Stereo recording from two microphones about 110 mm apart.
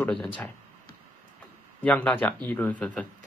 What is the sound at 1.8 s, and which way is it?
Speech, 10° left (ahead or behind).